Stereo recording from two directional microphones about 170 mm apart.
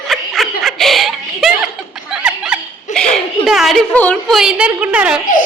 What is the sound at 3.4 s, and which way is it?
A woman's voice, centre (ahead or behind).